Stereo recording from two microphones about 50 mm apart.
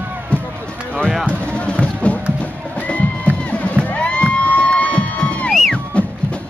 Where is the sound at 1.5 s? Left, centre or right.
Left.